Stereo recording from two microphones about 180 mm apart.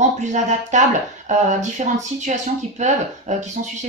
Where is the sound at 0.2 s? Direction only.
40° right (ahead or behind).